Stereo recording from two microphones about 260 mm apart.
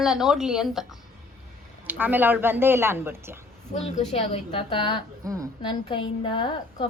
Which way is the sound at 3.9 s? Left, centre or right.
Left.